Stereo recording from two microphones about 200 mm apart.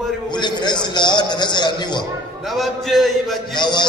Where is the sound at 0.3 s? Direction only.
20° left (ahead or behind).